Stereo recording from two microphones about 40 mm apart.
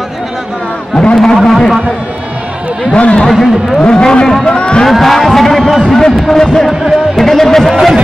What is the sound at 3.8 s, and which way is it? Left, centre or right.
Speech, centre.